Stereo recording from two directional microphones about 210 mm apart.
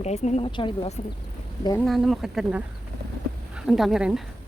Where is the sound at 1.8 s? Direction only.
Centre (ahead or behind).